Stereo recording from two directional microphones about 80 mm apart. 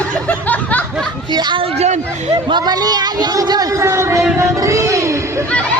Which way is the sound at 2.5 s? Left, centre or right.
Right.